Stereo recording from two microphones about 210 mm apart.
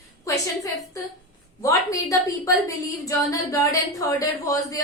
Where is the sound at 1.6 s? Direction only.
15° left (ahead or behind).